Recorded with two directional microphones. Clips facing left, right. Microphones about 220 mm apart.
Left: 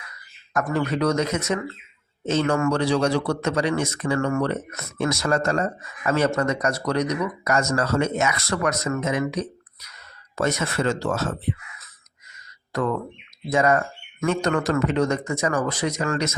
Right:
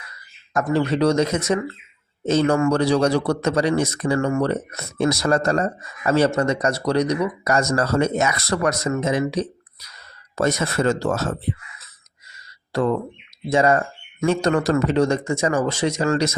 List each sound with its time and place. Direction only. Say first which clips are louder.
0.5 s speech: right 3 dB; 30° right (ahead or behind)
12.7 s speech: right 4 dB; 30° right (ahead or behind)